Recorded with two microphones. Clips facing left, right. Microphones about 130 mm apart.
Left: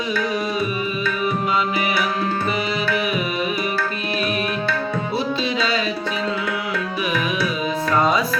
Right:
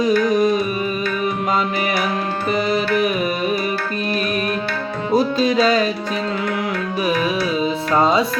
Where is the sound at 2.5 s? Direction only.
45° right (ahead or behind).